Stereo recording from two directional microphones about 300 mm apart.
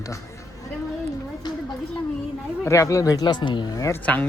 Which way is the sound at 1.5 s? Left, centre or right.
Centre.